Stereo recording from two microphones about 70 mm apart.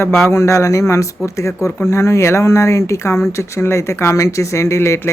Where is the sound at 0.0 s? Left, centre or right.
Left.